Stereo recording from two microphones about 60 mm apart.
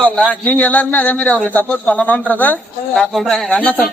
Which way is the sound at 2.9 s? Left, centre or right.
Centre.